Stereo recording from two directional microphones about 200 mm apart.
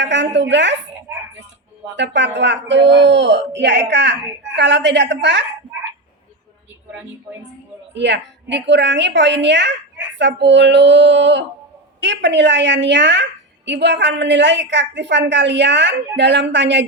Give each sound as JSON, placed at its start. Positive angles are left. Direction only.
{"t": 0.0, "sound": "a woman's voice", "side_deg": -60}
{"t": 2.0, "sound": "speech", "side_deg": -60}
{"t": 7.9, "sound": "speech", "side_deg": -60}